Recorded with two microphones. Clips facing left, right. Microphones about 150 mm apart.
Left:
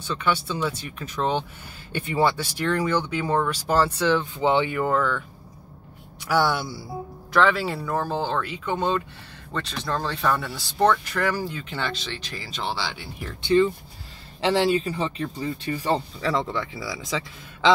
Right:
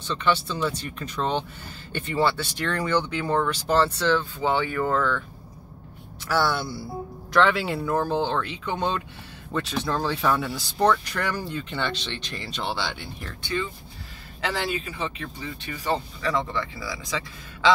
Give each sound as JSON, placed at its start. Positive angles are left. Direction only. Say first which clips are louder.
{"t": 0.0, "sound": "speech", "louder": "right 1 dB", "side_deg": 10}
{"t": 4.8, "sound": "speech", "louder": "left 1 dB", "side_deg": 10}
{"t": 6.2, "sound": "speech", "louder": "left 2 dB", "side_deg": 15}
{"t": 7.3, "sound": "speech", "louder": "even", "side_deg": 0}
{"t": 13.4, "sound": "speech", "louder": "left 11 dB", "side_deg": 30}